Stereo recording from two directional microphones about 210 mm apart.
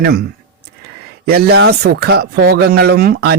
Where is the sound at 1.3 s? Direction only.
50° right (ahead or behind).